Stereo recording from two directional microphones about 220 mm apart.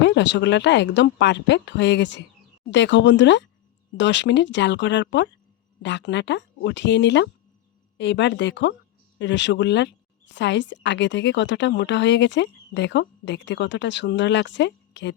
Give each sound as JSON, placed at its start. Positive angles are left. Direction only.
{"t": 0.0, "sound": "a woman's voice", "side_deg": 55}